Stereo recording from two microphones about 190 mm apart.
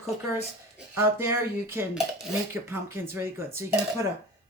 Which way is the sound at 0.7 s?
15° right (ahead or behind).